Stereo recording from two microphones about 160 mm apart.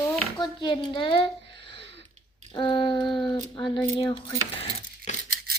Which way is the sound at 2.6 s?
30° left (ahead or behind).